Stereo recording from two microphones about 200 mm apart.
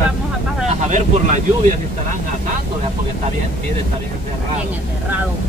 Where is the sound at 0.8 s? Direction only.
40° right (ahead or behind).